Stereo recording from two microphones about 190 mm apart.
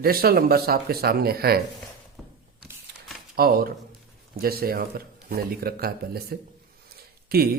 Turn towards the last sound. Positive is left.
turn(degrees=-55)  # may be behind; listen again after turning